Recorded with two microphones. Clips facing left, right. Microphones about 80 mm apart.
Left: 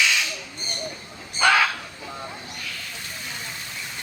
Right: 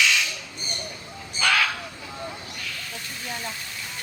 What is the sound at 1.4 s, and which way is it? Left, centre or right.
Crow, left.